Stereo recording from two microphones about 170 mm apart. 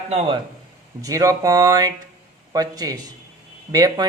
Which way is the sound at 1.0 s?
20° right (ahead or behind).